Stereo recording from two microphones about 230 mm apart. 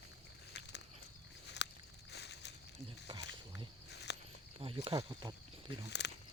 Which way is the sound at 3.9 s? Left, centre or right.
Left.